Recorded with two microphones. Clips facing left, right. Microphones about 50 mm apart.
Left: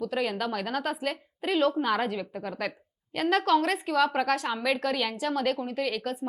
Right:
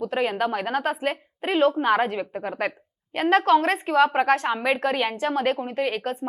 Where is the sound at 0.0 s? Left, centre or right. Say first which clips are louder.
Right 5 dB; right.